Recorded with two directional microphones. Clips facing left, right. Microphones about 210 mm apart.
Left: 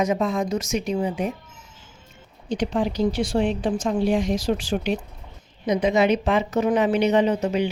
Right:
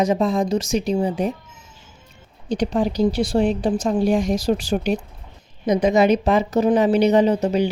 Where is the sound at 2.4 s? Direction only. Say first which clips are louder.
Right 3 dB; 40° right (ahead or behind).